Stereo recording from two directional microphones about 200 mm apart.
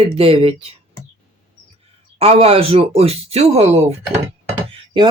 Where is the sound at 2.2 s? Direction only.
30° right (ahead or behind).